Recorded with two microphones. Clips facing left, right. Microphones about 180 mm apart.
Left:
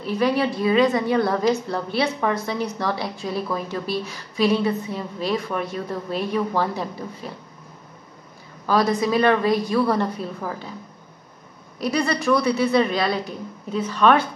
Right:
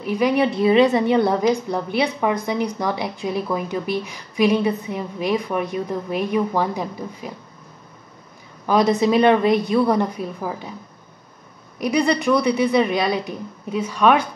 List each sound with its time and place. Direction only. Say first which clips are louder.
0.0 s a woman's voice: right 2 dB; 15° right (ahead or behind)
8.6 s a woman's voice: right 3 dB; 20° right (ahead or behind)
11.8 s a woman's voice: right 3 dB; 15° right (ahead or behind)